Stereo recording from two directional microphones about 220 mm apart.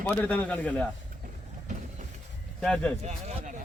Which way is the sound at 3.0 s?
30° right (ahead or behind).